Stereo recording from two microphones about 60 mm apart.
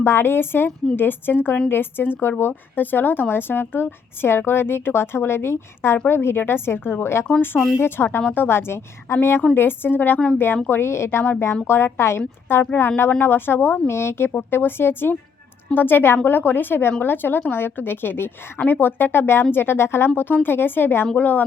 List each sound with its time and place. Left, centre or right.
0.0 s a woman's voice: left
13.9 s a woman's voice: left